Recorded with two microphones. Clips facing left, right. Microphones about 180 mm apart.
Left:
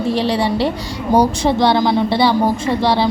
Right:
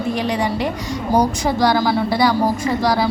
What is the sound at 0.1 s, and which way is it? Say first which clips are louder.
A woman's voice: left 3 dB; 30° left (ahead or behind).